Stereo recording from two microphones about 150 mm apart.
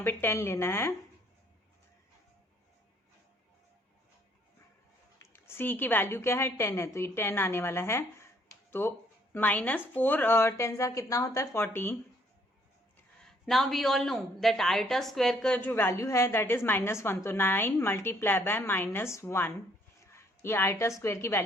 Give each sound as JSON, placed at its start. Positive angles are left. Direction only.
{"t": 0.0, "sound": "a woman's voice", "side_deg": 15}
{"t": 5.2, "sound": "a woman's voice", "side_deg": 15}
{"t": 13.2, "sound": "a woman's voice", "side_deg": 0}
{"t": 20.1, "sound": "a sound", "side_deg": 15}
{"t": 21.0, "sound": "a woman's voice", "side_deg": 15}